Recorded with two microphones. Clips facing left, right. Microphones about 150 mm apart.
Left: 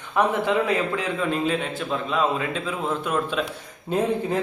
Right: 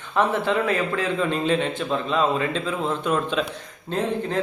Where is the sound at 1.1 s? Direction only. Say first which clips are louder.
Right 2 dB; 5° left (ahead or behind).